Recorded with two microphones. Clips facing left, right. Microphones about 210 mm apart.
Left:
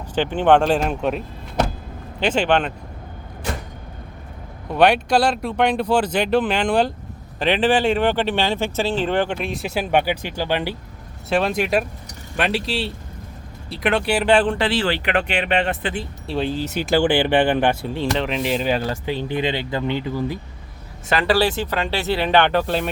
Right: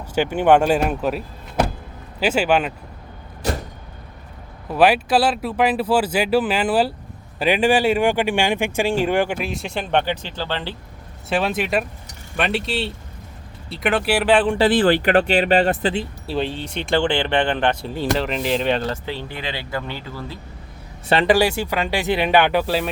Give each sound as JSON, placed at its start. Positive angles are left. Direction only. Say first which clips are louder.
{"t": 0.1, "sound": "speech", "louder": "right 1 dB", "side_deg": -10}
{"t": 4.7, "sound": "speech", "louder": "even", "side_deg": -5}
{"t": 11.3, "sound": "speech", "louder": "left 2 dB", "side_deg": 0}
{"t": 14.7, "sound": "speech", "louder": "right 5 dB", "side_deg": -50}
{"t": 15.1, "sound": "speech", "louder": "right 5 dB", "side_deg": -35}
{"t": 16.2, "sound": "speech", "louder": "left 5 dB", "side_deg": 0}
{"t": 17.9, "sound": "speech", "louder": "even", "side_deg": 0}
{"t": 21.2, "sound": "speech", "louder": "even", "side_deg": -15}